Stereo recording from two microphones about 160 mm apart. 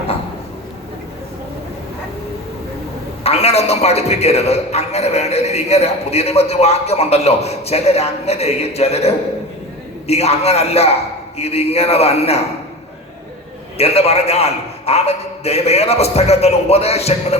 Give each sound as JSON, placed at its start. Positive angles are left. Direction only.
{"t": 3.2, "sound": "a man's voice", "side_deg": 40}
{"t": 13.7, "sound": "a man's voice", "side_deg": 40}